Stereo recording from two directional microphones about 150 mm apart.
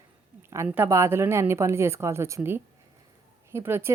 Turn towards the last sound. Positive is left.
turn(degrees=-15)  # may be behind; listen again after turning